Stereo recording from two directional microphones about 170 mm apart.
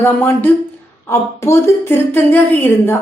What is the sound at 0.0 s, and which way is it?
A woman's voice, 10° left (ahead or behind).